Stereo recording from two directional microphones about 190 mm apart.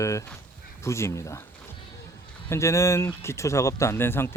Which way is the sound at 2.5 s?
15° left (ahead or behind).